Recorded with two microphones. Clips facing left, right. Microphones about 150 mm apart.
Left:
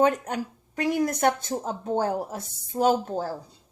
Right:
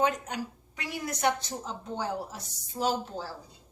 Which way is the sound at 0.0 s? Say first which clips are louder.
Left 6 dB; 50° left (ahead or behind).